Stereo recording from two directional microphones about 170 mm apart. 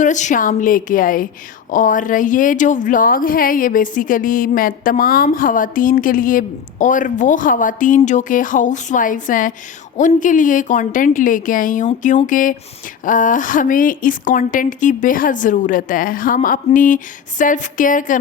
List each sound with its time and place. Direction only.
0.0 s speech: 45° left (ahead or behind)